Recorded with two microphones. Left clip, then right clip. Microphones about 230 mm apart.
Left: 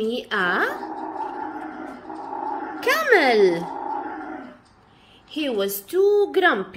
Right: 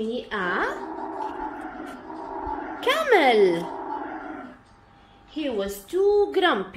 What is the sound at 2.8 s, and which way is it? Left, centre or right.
Speech, centre.